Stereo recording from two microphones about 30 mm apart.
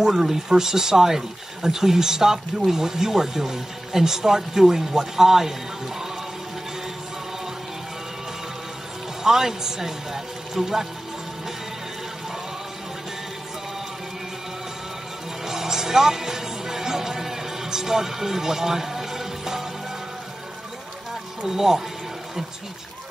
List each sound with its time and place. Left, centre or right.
0.1 s speech: centre
9.2 s speech: centre
15.4 s music: centre
21.5 s speech: centre